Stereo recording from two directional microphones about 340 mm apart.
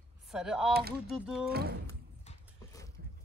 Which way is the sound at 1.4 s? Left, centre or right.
Right.